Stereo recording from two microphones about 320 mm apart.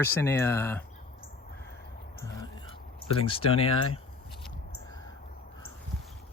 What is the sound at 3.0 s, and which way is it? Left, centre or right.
Speech, centre.